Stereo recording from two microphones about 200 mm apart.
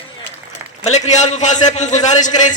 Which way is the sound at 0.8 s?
35° left (ahead or behind).